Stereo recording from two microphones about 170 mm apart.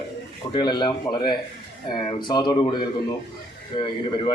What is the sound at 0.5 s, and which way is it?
A man's voice, 25° left (ahead or behind).